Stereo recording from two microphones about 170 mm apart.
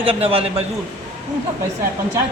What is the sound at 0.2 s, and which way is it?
Speech, 35° right (ahead or behind).